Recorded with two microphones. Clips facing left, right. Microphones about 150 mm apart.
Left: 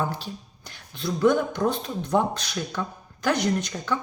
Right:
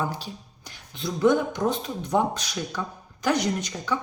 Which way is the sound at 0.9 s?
20° right (ahead or behind).